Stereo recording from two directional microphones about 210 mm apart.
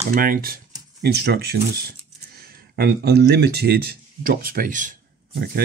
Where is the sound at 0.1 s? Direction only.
45° right (ahead or behind).